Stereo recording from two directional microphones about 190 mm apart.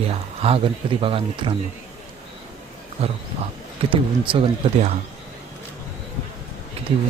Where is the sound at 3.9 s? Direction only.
25° right (ahead or behind).